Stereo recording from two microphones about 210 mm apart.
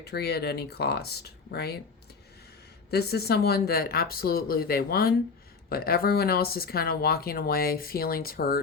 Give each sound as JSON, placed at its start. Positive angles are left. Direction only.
{"t": 0.0, "sound": "speech", "side_deg": 50}
{"t": 2.9, "sound": "speech", "side_deg": 50}